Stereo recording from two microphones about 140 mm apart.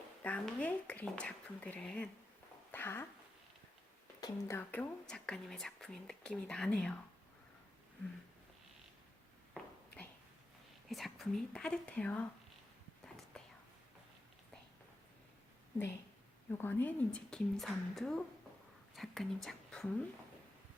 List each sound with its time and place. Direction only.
0.2 s a woman's voice: 10° left (ahead or behind)
4.2 s a woman's voice: 20° left (ahead or behind)
10.8 s a woman's voice: centre (ahead or behind)
16.5 s a woman's voice: 15° left (ahead or behind)